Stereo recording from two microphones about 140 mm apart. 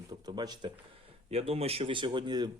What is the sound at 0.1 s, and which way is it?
Speech, 30° right (ahead or behind).